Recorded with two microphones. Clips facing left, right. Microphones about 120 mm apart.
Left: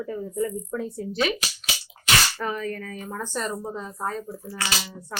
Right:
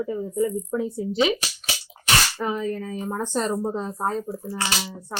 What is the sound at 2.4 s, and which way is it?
Speech, 20° right (ahead or behind).